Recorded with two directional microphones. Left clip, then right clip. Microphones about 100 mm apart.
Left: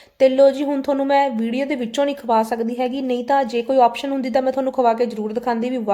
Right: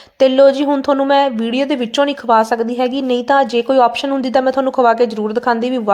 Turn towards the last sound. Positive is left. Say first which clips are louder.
# right 6 dB
turn(degrees=-20)  # may be behind; listen again after turning